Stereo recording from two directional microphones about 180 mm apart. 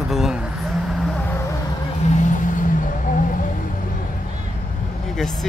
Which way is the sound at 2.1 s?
45° left (ahead or behind).